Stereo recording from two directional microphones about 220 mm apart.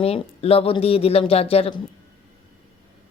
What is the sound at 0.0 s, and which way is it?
Speech, 25° left (ahead or behind).